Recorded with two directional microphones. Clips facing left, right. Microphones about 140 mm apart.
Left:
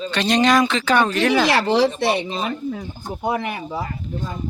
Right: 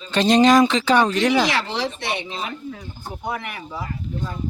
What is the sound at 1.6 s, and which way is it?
Speech, 40° left (ahead or behind).